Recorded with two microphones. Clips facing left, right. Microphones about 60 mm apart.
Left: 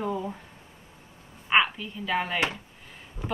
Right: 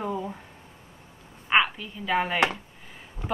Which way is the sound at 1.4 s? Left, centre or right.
Centre.